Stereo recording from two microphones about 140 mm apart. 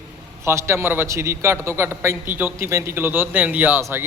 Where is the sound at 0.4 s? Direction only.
20° right (ahead or behind).